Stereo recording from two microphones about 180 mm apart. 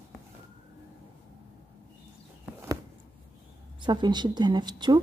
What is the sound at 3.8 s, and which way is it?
Speech, 25° right (ahead or behind).